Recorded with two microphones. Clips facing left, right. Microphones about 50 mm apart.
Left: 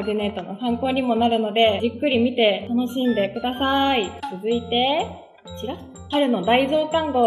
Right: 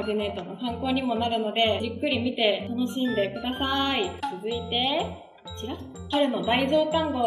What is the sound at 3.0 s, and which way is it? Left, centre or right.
Speech, centre.